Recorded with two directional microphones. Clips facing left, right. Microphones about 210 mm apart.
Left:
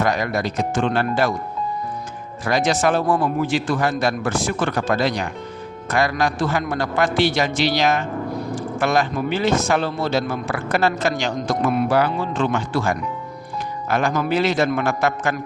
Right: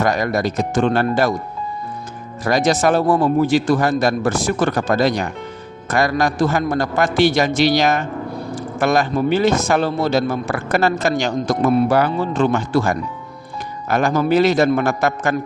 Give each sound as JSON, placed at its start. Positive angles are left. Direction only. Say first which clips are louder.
{"t": 0.0, "sound": "a man's voice", "louder": "right 3 dB", "side_deg": -45}
{"t": 2.4, "sound": "a man's voice", "louder": "right 3 dB", "side_deg": -40}
{"t": 11.9, "sound": "a man's voice", "louder": "right 2 dB", "side_deg": -45}